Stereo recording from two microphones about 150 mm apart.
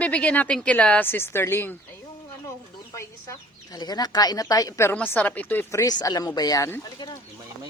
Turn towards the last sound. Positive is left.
turn(degrees=20)  # may be behind; listen again after turning